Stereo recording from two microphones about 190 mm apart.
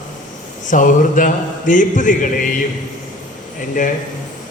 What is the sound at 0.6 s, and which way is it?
A man's voice, 45° left (ahead or behind).